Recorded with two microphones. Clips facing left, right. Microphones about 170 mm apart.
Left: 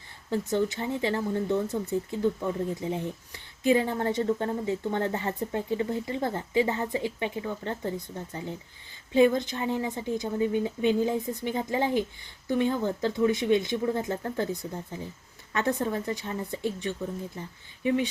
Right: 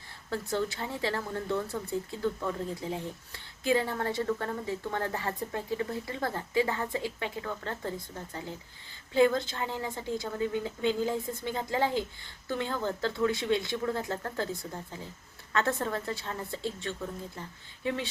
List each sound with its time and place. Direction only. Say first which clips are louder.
0.3 s speech: left 5 dB; 20° left (ahead or behind)